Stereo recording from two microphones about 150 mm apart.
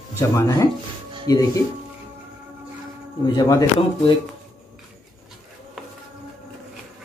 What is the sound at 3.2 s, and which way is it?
Speech, 25° left (ahead or behind).